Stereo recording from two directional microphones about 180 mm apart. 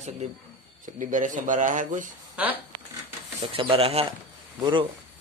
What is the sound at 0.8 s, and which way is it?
Speech, 45° right (ahead or behind).